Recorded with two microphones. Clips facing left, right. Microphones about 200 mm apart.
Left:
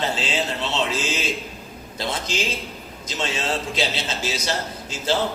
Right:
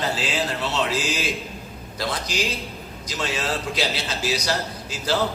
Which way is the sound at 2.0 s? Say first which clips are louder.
Even; 25° left (ahead or behind).